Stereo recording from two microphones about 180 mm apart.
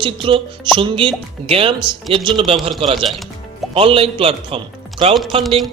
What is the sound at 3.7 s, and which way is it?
Speech, 30° right (ahead or behind).